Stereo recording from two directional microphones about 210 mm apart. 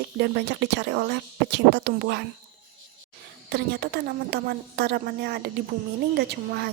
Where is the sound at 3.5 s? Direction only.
50° right (ahead or behind).